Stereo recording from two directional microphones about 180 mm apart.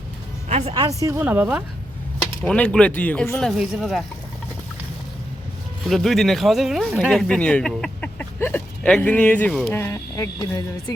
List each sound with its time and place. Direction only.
0.4 s speech: 35° right (ahead or behind)
1.0 s speech: 10° right (ahead or behind)
2.4 s speech: 5° left (ahead or behind)
5.8 s speech: centre (ahead or behind); by 10.9 s 20° left (ahead or behind)